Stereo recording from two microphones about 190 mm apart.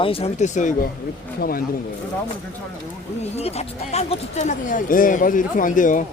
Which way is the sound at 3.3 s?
35° left (ahead or behind).